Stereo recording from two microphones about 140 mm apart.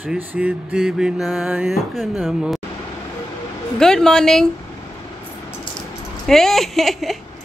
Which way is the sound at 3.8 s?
5° left (ahead or behind).